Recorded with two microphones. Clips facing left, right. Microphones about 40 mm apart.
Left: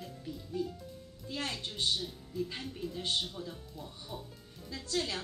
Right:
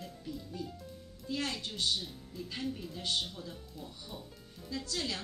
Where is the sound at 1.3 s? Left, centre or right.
Left.